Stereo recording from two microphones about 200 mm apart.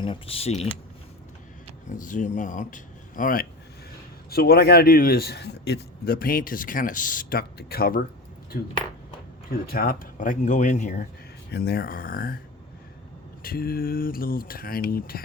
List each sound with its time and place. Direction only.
0.0 s speech: 25° left (ahead or behind)
2.0 s a man's voice: 40° left (ahead or behind)
11.5 s a man's voice: 50° left (ahead or behind)
13.4 s a man's voice: 50° left (ahead or behind)